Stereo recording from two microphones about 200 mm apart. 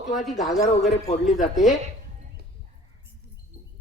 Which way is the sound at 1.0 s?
30° left (ahead or behind).